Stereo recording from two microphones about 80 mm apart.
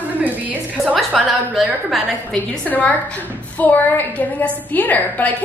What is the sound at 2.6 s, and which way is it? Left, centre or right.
A woman's voice, centre.